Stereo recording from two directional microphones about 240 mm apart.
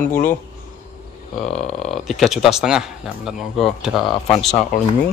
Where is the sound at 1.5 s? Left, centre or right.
Centre.